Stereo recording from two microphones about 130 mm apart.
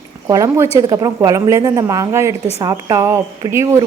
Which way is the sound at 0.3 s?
25° right (ahead or behind).